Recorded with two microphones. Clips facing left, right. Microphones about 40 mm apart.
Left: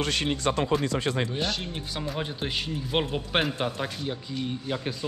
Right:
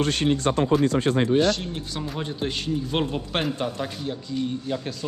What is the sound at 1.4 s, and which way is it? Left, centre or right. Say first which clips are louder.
A man's voice: right 7 dB; centre.